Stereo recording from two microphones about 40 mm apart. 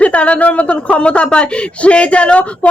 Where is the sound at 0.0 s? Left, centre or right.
Left.